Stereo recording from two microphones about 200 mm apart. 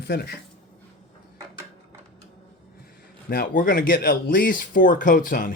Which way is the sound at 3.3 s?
45° left (ahead or behind).